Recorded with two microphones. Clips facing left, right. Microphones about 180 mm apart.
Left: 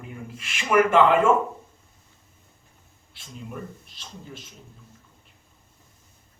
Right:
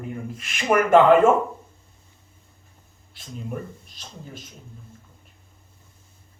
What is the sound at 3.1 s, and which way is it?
A man's voice, 45° right (ahead or behind).